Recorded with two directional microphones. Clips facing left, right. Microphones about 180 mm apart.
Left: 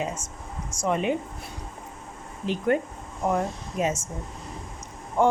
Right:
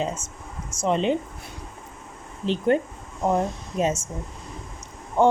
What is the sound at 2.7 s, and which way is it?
A woman's voice, 25° right (ahead or behind).